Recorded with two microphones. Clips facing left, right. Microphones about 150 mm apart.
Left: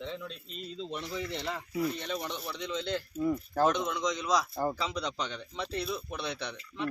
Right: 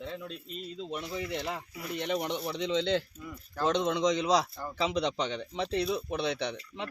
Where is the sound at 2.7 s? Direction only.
90° right.